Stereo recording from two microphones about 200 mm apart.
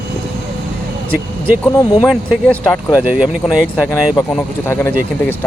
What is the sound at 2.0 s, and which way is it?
Speech, 5° left (ahead or behind).